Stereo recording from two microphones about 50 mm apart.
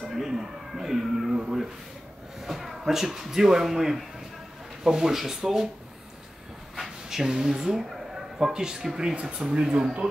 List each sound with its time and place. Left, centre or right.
0.0 s speech: centre
2.4 s speech: centre
6.7 s speech: centre